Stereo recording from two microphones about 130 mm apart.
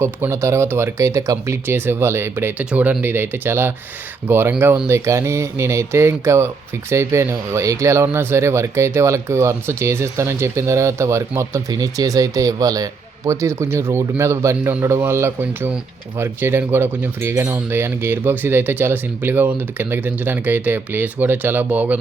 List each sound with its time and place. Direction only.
0.0 s speech: 20° right (ahead or behind)